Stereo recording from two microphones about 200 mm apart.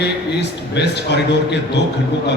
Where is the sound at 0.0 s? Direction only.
55° left (ahead or behind).